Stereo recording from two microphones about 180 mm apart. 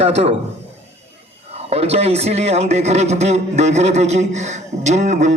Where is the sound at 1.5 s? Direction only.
35° right (ahead or behind).